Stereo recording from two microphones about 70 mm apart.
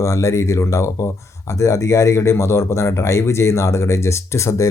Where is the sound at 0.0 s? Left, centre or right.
Left.